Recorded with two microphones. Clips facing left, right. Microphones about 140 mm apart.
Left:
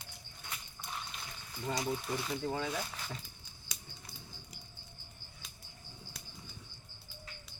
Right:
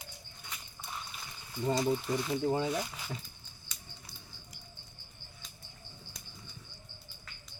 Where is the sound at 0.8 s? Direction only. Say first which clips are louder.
Right 1 dB; centre (ahead or behind).